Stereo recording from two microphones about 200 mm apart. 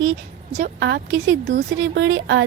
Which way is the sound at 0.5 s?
55° right (ahead or behind).